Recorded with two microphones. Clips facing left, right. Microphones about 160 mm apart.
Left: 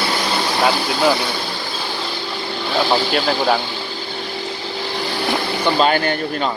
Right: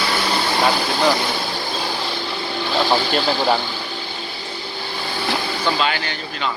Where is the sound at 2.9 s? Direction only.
Centre (ahead or behind).